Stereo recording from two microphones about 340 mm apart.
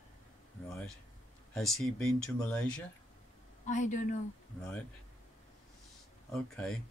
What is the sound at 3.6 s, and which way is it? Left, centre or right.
Speech, left.